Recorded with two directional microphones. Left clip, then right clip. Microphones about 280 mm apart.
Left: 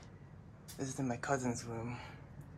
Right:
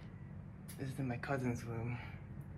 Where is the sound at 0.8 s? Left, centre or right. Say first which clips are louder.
Left 4 dB; centre.